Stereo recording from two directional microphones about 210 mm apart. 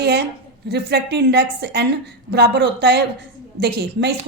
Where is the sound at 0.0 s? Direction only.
50° right (ahead or behind).